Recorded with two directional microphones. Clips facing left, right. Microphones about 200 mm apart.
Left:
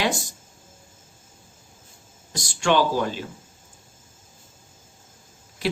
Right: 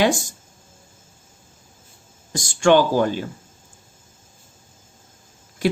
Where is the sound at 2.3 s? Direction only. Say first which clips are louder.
Right 6 dB; 50° right (ahead or behind).